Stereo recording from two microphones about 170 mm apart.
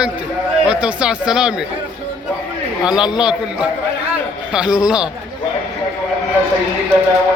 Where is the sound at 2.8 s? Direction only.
5° right (ahead or behind).